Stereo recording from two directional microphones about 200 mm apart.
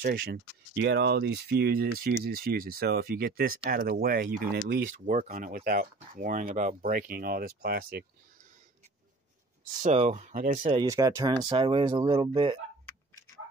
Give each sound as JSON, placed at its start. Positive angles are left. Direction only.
{"t": 0.0, "sound": "speech", "side_deg": -50}
{"t": 9.8, "sound": "speech", "side_deg": -35}